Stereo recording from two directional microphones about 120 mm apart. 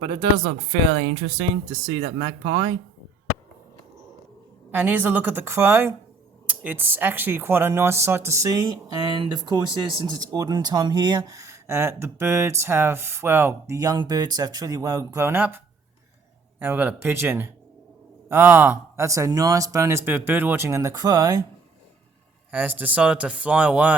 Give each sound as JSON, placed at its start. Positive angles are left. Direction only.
{"t": 0.0, "sound": "speech", "side_deg": -40}
{"t": 1.7, "sound": "speech", "side_deg": -35}
{"t": 4.7, "sound": "speech", "side_deg": -15}
{"t": 22.5, "sound": "speech", "side_deg": -15}